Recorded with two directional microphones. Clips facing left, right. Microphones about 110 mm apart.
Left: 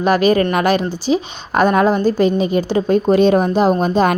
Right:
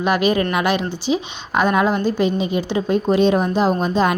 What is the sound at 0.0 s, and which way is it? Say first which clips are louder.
A woman's voice: left 4 dB; 40° left (ahead or behind).